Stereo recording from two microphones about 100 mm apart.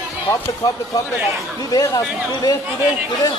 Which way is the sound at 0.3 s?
35° left (ahead or behind).